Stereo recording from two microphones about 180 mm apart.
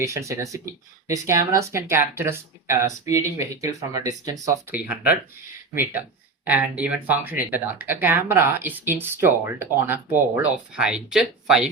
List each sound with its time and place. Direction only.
0.0 s speech: 15° right (ahead or behind)